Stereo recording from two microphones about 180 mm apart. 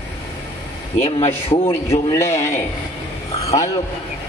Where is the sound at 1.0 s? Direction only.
35° left (ahead or behind).